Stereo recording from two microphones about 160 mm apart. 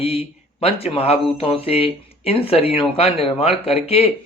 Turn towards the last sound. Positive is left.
turn(degrees=40)  # may be behind; listen again after turning